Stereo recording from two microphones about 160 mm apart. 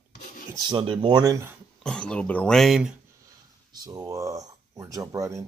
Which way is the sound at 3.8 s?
25° right (ahead or behind).